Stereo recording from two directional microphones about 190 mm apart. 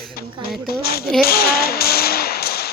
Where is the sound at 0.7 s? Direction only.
55° left (ahead or behind).